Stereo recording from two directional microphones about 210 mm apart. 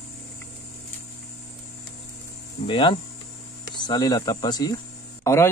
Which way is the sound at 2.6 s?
25° left (ahead or behind).